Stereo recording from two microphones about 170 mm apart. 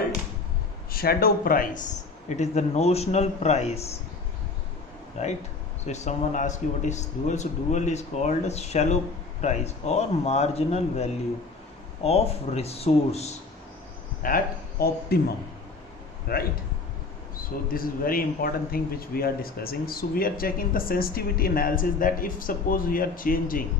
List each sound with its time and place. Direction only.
0.9 s speech: 60° left (ahead or behind); by 3.9 s 40° left (ahead or behind)
5.2 s speech: 40° left (ahead or behind)
14.2 s speech: 55° left (ahead or behind)
16.3 s speech: 60° left (ahead or behind)
17.7 s speech: 60° left (ahead or behind)